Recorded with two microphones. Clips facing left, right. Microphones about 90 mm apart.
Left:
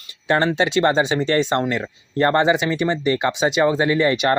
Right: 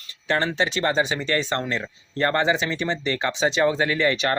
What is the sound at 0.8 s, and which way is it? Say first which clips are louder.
Speech: left 6 dB; 25° left (ahead or behind).